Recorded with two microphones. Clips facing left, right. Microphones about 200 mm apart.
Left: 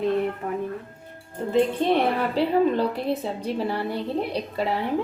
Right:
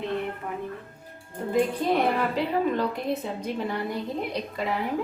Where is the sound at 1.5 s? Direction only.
30° left (ahead or behind).